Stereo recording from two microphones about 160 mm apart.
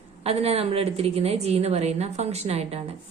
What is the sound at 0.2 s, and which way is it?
A woman's voice, 40° right (ahead or behind).